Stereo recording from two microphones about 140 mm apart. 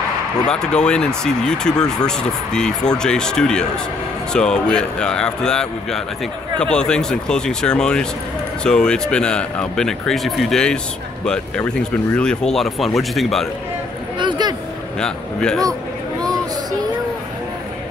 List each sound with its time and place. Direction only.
0.5 s speech: 5° left (ahead or behind)
14.1 s a sound: 35° right (ahead or behind)
15.0 s speech: 5° left (ahead or behind)